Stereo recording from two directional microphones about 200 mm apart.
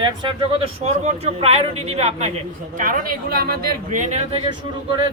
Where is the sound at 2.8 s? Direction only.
45° right (ahead or behind).